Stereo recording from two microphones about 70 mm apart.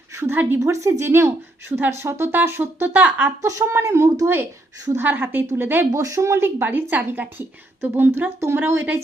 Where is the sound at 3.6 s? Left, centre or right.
Right.